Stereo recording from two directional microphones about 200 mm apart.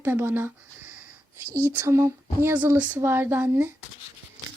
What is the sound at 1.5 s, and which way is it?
Speech, 10° right (ahead or behind).